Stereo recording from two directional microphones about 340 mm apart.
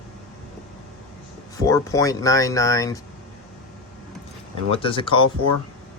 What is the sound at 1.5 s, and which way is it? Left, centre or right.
Speech, centre.